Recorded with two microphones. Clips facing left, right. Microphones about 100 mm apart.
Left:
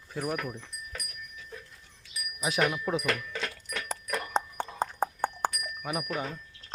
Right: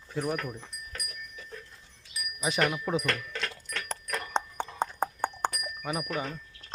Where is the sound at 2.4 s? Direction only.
Centre (ahead or behind).